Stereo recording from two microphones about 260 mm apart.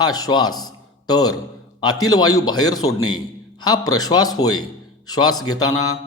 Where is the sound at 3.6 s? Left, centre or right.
Centre.